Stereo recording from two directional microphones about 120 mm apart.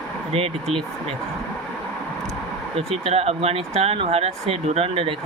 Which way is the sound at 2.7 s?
55° right (ahead or behind).